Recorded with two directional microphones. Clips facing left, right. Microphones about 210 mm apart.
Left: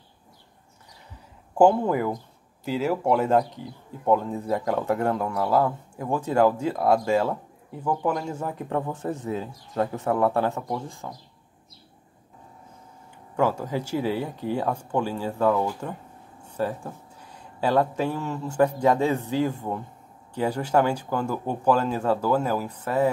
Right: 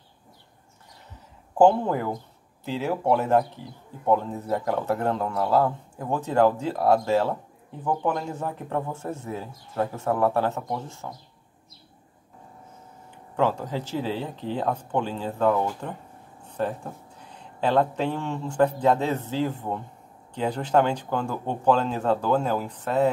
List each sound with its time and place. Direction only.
1.6 s speech: 10° left (ahead or behind)
13.4 s speech: 10° left (ahead or behind)
16.4 s a sound: 10° left (ahead or behind)
17.2 s speech: 10° left (ahead or behind)
21.1 s speech: 20° right (ahead or behind)
21.6 s speech: 10° left (ahead or behind)
22.1 s speech: 20° right (ahead or behind)
22.4 s speech: 10° left (ahead or behind)